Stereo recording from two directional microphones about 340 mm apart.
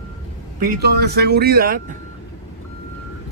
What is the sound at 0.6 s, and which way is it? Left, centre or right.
Speech, right.